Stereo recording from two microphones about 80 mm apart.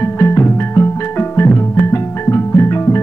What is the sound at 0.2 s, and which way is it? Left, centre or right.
Music, left.